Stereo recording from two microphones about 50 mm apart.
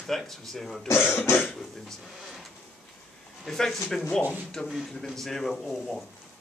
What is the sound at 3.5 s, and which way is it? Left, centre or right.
Speech, centre.